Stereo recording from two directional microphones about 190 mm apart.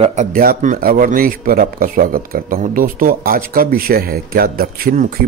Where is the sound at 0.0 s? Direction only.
40° right (ahead or behind).